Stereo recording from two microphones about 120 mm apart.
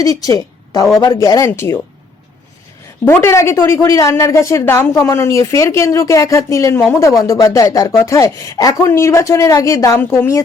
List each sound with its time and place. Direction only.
0.0 s a woman's voice: 30° left (ahead or behind)
3.0 s a woman's voice: 20° left (ahead or behind)